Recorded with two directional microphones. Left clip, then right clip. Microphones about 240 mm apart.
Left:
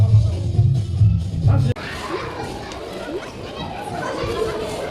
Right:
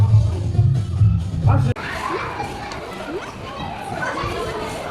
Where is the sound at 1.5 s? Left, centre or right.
Centre.